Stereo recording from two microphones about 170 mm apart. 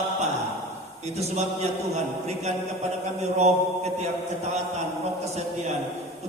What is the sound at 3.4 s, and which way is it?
Mantra, 40° right (ahead or behind).